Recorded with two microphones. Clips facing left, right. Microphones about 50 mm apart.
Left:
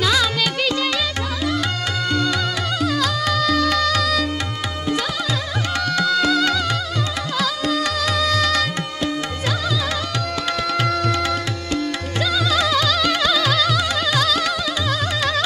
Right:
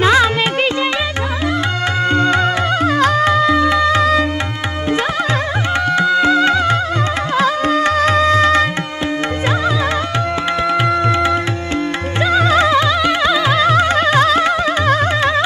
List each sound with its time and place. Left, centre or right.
0.0 s music: right
2.0 s music: right
5.9 s music: right
7.3 s carnatic music: right
10.7 s music: right